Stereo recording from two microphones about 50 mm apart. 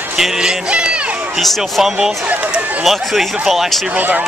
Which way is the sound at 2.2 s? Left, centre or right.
Right.